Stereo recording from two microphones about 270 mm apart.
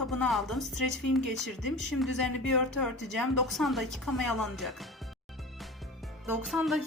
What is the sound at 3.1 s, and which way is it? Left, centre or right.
Speech, centre.